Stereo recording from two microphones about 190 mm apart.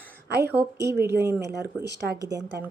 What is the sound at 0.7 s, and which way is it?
Speech, 60° right (ahead or behind).